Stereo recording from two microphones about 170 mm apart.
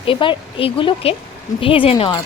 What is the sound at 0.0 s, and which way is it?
A woman's voice, 30° left (ahead or behind).